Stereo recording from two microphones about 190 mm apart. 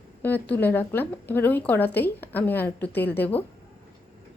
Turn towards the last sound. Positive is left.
turn(degrees=10)  # may be behind; listen again after turning